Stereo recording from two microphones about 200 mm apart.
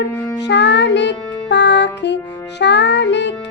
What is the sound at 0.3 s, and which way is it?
Music, 60° left (ahead or behind).